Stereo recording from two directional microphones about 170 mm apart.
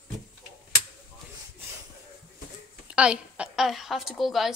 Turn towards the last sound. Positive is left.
turn(degrees=0)  # may be behind; listen again after turning